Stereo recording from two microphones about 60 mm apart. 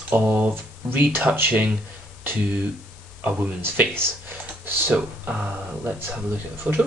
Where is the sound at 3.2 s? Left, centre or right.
Right.